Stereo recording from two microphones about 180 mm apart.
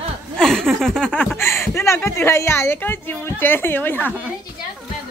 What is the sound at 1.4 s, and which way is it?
A woman's voice, 15° left (ahead or behind).